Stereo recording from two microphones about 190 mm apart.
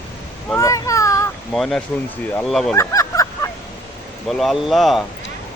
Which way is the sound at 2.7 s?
15° left (ahead or behind).